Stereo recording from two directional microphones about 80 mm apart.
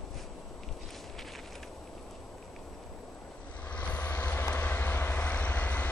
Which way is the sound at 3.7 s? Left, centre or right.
Centre.